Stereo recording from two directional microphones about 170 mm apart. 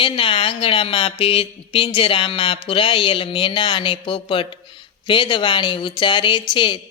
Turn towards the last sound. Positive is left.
turn(degrees=30)  # may be behind; listen again after turning